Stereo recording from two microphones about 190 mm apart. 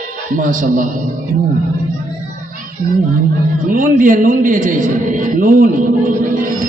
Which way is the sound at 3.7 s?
45° right (ahead or behind).